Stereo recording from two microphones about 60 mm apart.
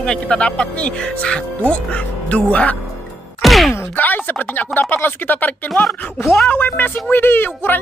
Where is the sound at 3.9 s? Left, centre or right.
Left.